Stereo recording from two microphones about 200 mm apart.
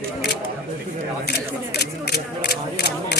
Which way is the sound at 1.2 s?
55° left (ahead or behind).